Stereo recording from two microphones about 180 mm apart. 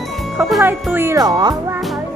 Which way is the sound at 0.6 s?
10° right (ahead or behind).